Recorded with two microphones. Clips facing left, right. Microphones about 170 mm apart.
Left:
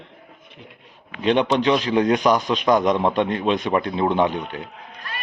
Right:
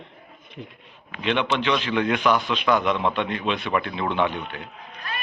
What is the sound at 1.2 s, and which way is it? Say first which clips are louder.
Speech: left 5 dB; 40° left (ahead or behind).